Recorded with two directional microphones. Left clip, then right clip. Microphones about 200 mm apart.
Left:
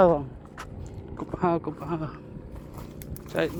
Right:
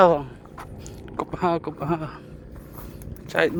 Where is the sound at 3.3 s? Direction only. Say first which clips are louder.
Right 6 dB; 45° right (ahead or behind).